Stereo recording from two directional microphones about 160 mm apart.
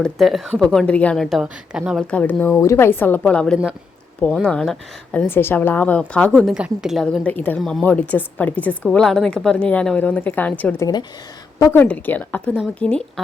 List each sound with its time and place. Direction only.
0.0 s a woman's voice: centre (ahead or behind)
2.0 s a woman's voice: 10° left (ahead or behind)
5.2 s a woman's voice: 15° left (ahead or behind)